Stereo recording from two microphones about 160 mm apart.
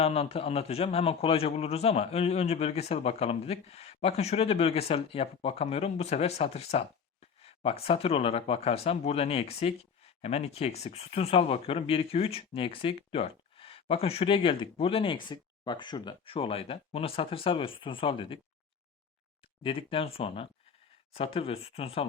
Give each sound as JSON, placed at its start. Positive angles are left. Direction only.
{"t": 0.0, "sound": "speech", "side_deg": 40}
{"t": 19.6, "sound": "speech", "side_deg": 35}